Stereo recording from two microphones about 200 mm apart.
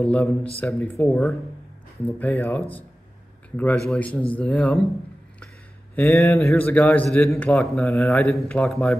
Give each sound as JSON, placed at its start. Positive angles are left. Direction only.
{"t": 0.0, "sound": "a man's voice", "side_deg": 5}
{"t": 5.9, "sound": "a man's voice", "side_deg": 10}
{"t": 7.8, "sound": "speech", "side_deg": 15}
{"t": 8.1, "sound": "a man's voice", "side_deg": 0}